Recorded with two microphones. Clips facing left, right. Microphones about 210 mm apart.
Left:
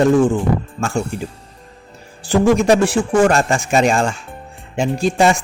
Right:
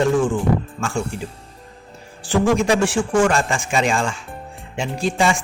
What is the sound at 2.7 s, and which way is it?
Speech, 40° left (ahead or behind).